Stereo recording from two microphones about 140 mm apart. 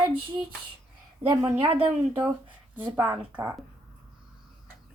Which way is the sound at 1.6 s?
40° right (ahead or behind).